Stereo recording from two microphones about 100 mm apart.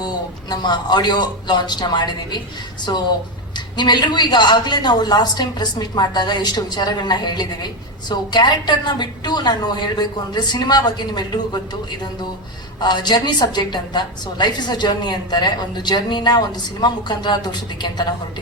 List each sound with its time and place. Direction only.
0.5 s a woman's voice: 45° left (ahead or behind)
12.8 s a woman's voice: 45° left (ahead or behind)